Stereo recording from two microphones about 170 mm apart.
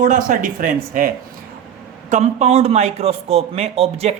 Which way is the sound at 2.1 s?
40° right (ahead or behind).